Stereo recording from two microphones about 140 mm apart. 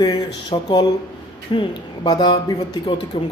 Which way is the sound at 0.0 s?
30° left (ahead or behind).